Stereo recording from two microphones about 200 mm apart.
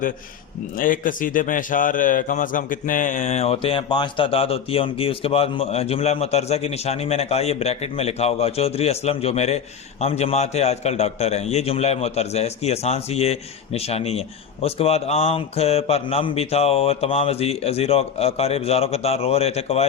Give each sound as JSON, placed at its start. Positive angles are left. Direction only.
{"t": 0.8, "sound": "a man's voice", "side_deg": 45}